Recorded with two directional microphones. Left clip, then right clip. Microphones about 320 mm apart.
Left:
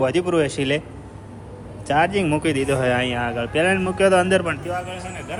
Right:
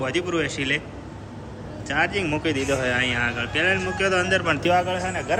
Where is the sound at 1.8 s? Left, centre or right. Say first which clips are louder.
Left 4 dB; centre.